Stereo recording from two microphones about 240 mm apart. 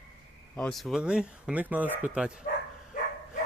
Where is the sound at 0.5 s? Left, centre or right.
Centre.